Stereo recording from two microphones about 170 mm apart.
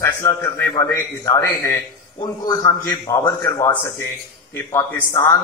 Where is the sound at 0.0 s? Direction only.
20° left (ahead or behind).